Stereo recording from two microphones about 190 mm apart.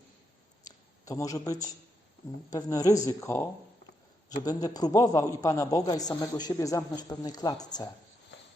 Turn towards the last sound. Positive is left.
turn(degrees=20)  # may be behind; listen again after turning